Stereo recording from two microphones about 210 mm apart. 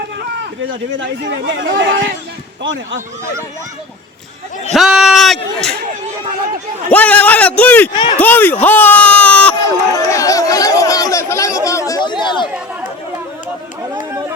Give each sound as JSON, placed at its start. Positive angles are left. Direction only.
{"t": 0.7, "sound": "speech", "side_deg": -65}
{"t": 1.6, "sound": "speech", "side_deg": -45}
{"t": 4.7, "sound": "speech", "side_deg": 0}
{"t": 6.9, "sound": "a man's voice", "side_deg": 5}
{"t": 7.9, "sound": "speech", "side_deg": 25}
{"t": 8.2, "sound": "a man's voice", "side_deg": 10}
{"t": 8.6, "sound": "a sound", "side_deg": 10}